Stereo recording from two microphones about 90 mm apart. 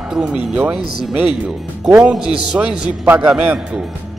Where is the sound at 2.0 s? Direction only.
10° right (ahead or behind).